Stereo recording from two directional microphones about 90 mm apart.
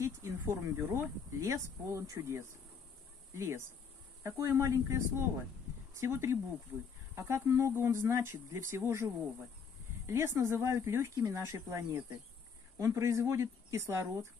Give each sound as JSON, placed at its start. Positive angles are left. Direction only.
{"t": 0.0, "sound": "speech", "side_deg": -30}